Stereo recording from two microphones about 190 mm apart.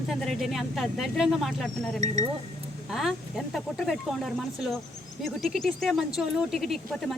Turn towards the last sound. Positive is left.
turn(degrees=0)  # may be behind; listen again after turning